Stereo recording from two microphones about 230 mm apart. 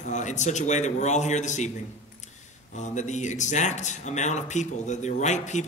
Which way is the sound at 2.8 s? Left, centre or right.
Left.